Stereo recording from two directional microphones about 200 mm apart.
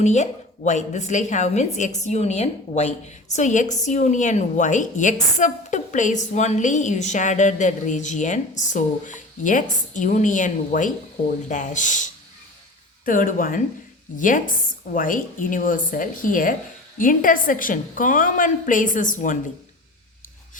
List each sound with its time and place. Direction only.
0.0 s a woman's voice: 35° left (ahead or behind)
13.1 s a woman's voice: 45° left (ahead or behind)